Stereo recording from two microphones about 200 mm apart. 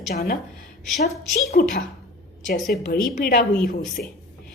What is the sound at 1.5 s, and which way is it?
A woman's voice, 50° left (ahead or behind).